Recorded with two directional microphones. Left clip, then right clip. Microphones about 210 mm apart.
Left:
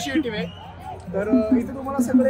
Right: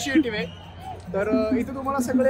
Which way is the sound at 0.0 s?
5° right (ahead or behind).